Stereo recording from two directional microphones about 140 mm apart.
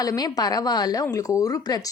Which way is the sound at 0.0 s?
25° left (ahead or behind).